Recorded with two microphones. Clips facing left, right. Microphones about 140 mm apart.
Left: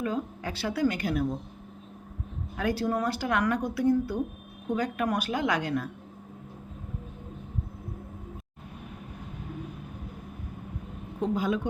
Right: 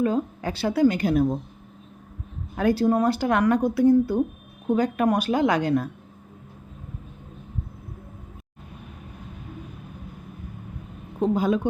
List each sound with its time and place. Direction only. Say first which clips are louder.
0.0 s speech: right 7 dB; 30° right (ahead or behind)
2.6 s speech: right 7 dB; 30° right (ahead or behind)
11.2 s a woman's voice: right 6 dB; 35° right (ahead or behind)